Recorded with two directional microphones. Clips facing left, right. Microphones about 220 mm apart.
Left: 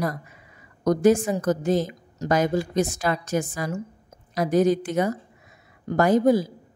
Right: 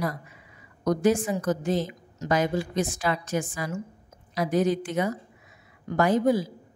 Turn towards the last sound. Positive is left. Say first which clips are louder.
# left 3 dB
turn(degrees=40)  # may be behind; listen again after turning